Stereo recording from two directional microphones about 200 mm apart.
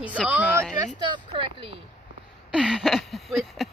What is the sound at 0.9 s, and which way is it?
Speech, 20° right (ahead or behind).